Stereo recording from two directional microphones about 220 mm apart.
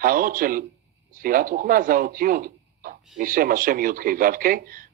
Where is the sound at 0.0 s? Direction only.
40° right (ahead or behind).